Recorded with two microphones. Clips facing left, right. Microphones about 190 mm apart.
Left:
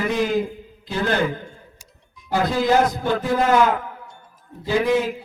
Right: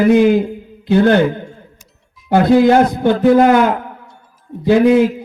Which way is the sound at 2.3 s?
60° right (ahead or behind).